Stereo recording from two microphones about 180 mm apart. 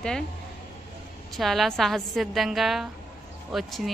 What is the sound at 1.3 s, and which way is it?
A woman's voice, centre (ahead or behind).